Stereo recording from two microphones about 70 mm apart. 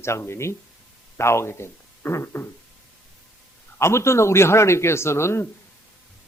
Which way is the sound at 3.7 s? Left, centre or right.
Left.